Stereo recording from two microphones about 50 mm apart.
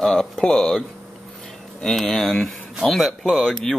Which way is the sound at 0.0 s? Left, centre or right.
Centre.